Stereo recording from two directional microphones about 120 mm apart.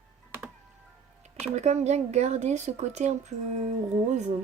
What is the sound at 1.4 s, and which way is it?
Speech, 70° right (ahead or behind).